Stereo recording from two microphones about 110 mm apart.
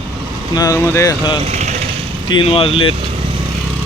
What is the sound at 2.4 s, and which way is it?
Speech, 60° left (ahead or behind).